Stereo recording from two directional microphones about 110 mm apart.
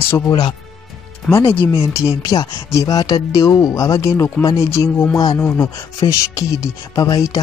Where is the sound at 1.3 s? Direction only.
20° left (ahead or behind).